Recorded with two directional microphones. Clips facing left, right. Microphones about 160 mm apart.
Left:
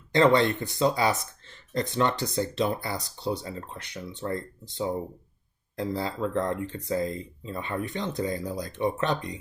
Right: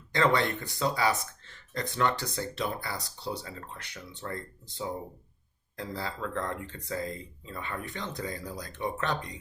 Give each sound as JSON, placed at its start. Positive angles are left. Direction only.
{"t": 0.1, "sound": "speech", "side_deg": 25}
{"t": 5.7, "sound": "speech", "side_deg": 20}